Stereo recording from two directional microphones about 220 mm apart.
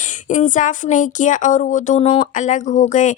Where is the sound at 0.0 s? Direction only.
35° left (ahead or behind).